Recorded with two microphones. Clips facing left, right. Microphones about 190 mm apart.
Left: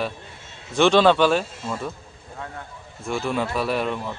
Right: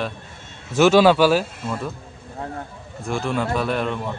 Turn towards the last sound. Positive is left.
turn(degrees=5)  # may be behind; listen again after turning